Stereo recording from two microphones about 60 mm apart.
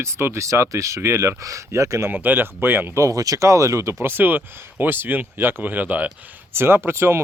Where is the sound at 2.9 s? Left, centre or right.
Right.